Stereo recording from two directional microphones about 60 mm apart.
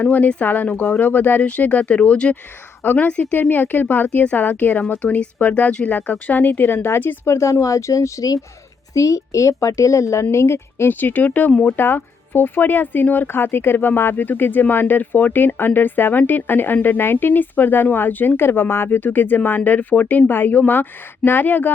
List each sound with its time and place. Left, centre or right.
0.0 s speech: left
3.5 s speech: left
7.3 s speech: left
8.9 s speech: left
11.0 s speech: left